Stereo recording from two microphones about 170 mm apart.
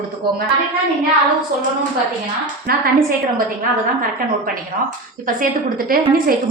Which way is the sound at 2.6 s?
60° right (ahead or behind).